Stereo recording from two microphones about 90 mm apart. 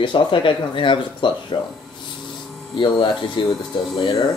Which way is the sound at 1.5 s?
50° left (ahead or behind).